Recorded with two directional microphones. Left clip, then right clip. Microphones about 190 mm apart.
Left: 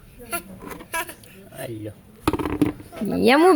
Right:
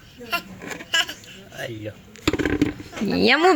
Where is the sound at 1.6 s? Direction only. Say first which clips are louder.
Right 1 dB; 60° left (ahead or behind).